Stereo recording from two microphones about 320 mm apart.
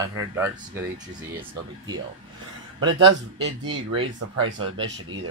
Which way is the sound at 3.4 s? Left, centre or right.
Right.